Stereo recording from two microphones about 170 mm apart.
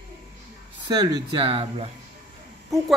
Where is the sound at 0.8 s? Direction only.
25° right (ahead or behind).